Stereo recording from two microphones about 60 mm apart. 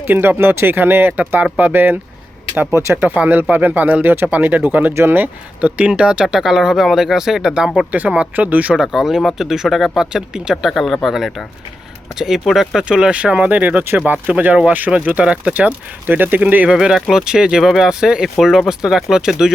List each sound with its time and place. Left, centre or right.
0.0 s speech: right
2.7 s speech: right
3.5 s speech: right; by 6.2 s centre
6.2 s speech: centre
7.9 s speech: right
8.8 s speech: centre; by 16.6 s right
16.6 s speech: centre
18.3 s speech: centre